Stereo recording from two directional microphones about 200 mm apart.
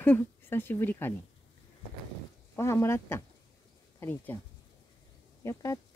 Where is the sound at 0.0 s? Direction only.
10° left (ahead or behind).